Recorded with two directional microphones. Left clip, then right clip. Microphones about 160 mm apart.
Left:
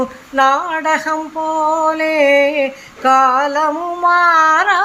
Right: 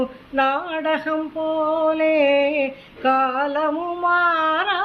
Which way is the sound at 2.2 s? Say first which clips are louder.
Left 6 dB; 35° left (ahead or behind).